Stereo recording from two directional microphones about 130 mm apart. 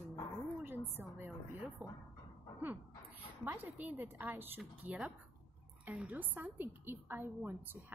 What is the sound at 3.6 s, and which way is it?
A woman's voice, 15° right (ahead or behind).